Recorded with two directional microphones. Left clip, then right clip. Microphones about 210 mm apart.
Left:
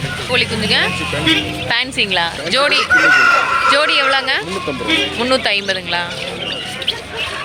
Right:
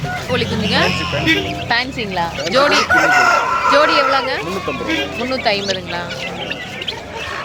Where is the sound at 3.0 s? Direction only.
55° right (ahead or behind).